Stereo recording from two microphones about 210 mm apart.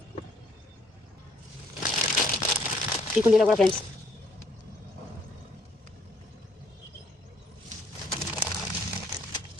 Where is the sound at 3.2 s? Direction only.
5° right (ahead or behind).